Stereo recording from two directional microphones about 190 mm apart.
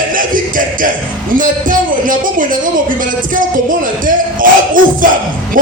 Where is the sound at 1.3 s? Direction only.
45° right (ahead or behind).